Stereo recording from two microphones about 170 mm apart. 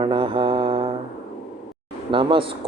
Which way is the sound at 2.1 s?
30° right (ahead or behind).